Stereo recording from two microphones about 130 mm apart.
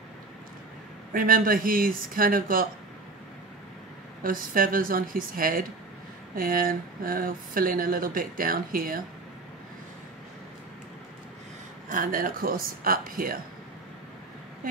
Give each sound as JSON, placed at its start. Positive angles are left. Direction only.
{"t": 1.1, "sound": "speech", "side_deg": -90}
{"t": 4.2, "sound": "speech", "side_deg": -90}
{"t": 11.9, "sound": "speech", "side_deg": -90}